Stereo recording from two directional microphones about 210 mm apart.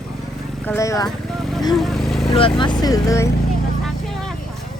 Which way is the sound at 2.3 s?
25° left (ahead or behind).